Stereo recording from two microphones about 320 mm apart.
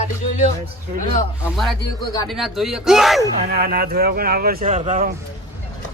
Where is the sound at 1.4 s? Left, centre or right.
Centre.